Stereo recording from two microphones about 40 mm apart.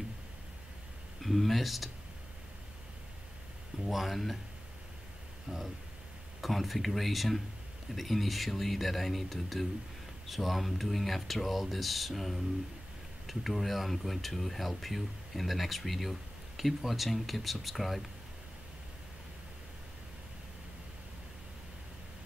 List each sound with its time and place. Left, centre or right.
1.2 s speech: centre
3.8 s speech: centre
5.5 s speech: right
6.4 s speech: centre